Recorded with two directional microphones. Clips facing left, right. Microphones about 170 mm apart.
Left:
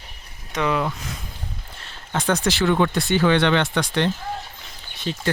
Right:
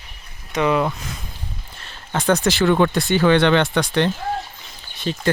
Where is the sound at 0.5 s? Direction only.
15° right (ahead or behind).